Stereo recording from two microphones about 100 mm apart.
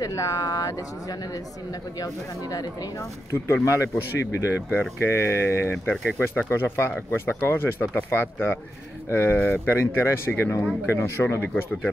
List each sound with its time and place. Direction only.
0.0 s speech: 35° left (ahead or behind)
2.5 s speech: 40° left (ahead or behind); by 11.9 s 20° left (ahead or behind)